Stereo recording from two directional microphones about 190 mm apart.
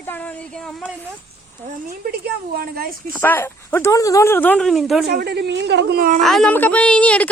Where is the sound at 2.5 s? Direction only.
50° right (ahead or behind).